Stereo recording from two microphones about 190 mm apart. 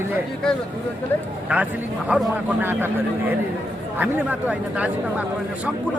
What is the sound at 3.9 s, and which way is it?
Speech, 10° right (ahead or behind).